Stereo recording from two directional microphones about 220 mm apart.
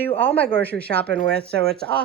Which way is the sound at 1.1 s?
55° right (ahead or behind).